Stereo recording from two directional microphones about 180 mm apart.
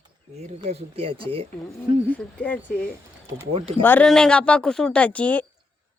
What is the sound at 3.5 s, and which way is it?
Speech, 30° right (ahead or behind).